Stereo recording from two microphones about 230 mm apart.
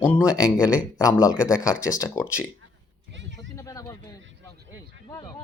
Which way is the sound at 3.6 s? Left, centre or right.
Centre.